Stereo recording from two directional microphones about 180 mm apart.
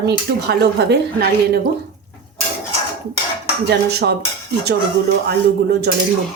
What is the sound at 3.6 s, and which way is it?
Speech, 65° right (ahead or behind).